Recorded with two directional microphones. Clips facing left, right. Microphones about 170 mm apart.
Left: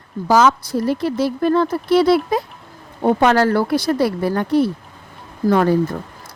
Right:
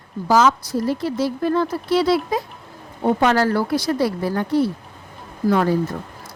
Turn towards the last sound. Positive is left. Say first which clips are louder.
# left 3 dB
turn(degrees=55)  # may be behind; listen again after turning